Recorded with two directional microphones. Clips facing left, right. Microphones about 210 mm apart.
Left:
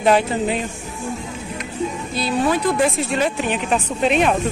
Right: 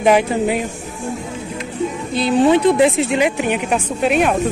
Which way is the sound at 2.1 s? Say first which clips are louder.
Right 7 dB; 20° right (ahead or behind).